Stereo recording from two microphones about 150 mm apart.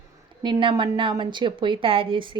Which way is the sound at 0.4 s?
30° right (ahead or behind).